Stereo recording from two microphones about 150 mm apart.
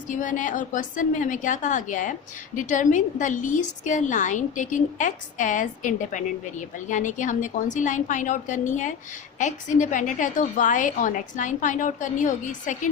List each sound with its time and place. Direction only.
0.1 s a woman's voice: 60° left (ahead or behind)